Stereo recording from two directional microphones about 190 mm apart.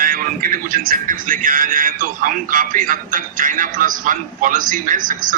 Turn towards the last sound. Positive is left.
turn(degrees=-45)  # may be behind; listen again after turning